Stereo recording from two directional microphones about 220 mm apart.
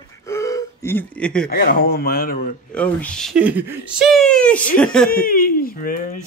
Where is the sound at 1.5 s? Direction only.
45° left (ahead or behind).